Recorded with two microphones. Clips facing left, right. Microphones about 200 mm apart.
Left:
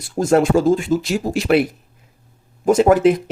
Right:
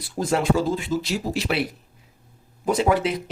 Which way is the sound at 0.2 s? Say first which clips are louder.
Left 7 dB; 50° left (ahead or behind).